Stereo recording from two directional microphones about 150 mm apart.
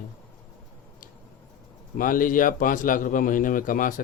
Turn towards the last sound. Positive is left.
turn(degrees=65)  # may be behind; listen again after turning